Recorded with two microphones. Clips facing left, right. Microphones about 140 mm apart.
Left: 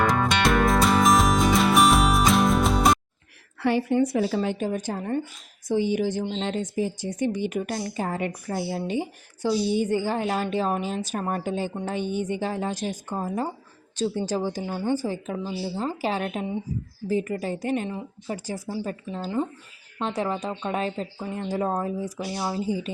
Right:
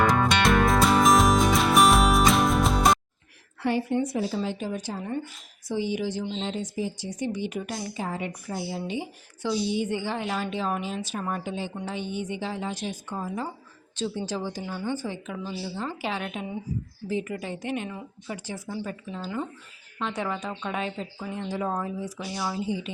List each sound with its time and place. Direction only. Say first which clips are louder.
0.0 s music: even; centre (ahead or behind)
3.6 s a woman's voice: left 4 dB; 80° left; by 22.9 s 40° left (ahead or behind)